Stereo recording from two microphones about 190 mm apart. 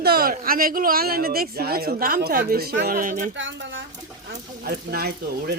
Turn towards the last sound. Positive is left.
turn(degrees=-55)  # may be behind; listen again after turning